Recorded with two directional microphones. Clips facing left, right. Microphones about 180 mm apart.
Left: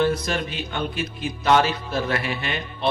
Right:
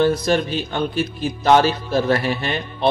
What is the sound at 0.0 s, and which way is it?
A man's voice, 35° right (ahead or behind).